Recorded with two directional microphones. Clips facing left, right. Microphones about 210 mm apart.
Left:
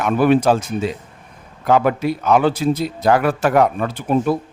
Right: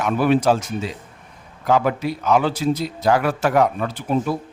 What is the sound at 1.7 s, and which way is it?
A man's voice, 55° left (ahead or behind).